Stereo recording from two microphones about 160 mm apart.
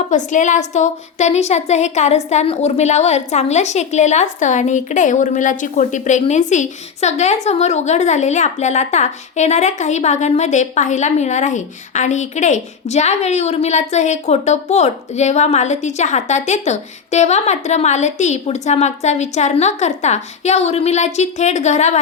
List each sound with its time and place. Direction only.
0.1 s speech: 50° left (ahead or behind)